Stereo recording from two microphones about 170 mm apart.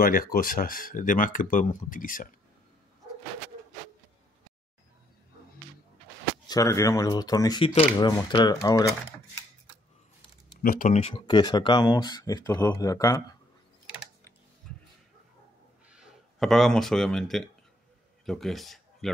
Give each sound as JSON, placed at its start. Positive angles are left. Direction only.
{"t": 0.0, "sound": "speech", "side_deg": 55}
{"t": 6.4, "sound": "speech", "side_deg": 20}
{"t": 10.6, "sound": "speech", "side_deg": 55}
{"t": 10.9, "sound": "speech", "side_deg": 35}
{"t": 14.6, "sound": "a sound", "side_deg": 5}
{"t": 15.9, "sound": "speech", "side_deg": -5}